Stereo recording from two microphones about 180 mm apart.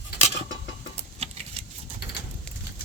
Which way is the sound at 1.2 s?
35° right (ahead or behind).